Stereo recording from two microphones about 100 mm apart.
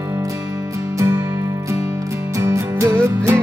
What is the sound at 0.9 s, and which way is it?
Music, 30° right (ahead or behind).